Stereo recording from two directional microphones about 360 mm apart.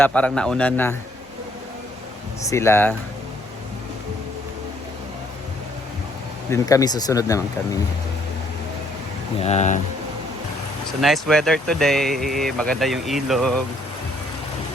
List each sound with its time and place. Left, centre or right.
0.0 s speech: centre
2.5 s speech: centre
6.5 s speech: centre
9.4 s speech: centre
11.0 s speech: centre